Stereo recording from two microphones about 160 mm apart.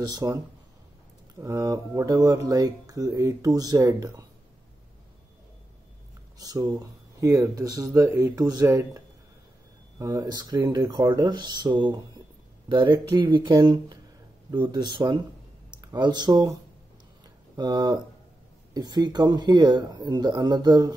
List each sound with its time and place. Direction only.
0.0 s speech: 25° right (ahead or behind)
1.4 s speech: 20° right (ahead or behind)
6.3 s speech: 25° right (ahead or behind)
17.6 s speech: 25° right (ahead or behind)